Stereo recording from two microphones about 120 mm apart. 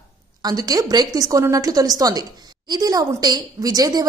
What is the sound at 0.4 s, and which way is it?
A woman's voice, 30° right (ahead or behind).